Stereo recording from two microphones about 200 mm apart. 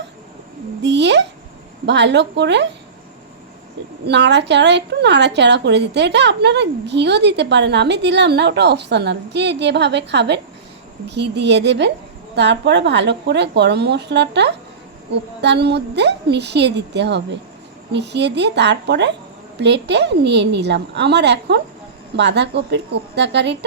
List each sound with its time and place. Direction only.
0.8 s a sound: 60° right (ahead or behind)
1.9 s a woman's voice: 60° right (ahead or behind)
4.0 s a woman's voice: 60° right (ahead or behind)